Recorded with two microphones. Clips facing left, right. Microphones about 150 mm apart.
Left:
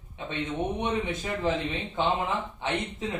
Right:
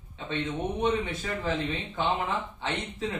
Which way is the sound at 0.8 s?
15° left (ahead or behind).